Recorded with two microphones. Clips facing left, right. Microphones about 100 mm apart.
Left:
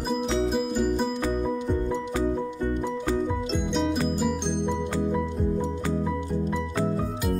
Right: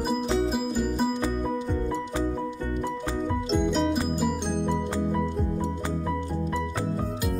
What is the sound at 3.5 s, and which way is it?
Music, centre (ahead or behind).